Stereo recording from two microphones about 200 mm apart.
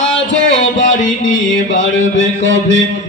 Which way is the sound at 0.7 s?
40° left (ahead or behind).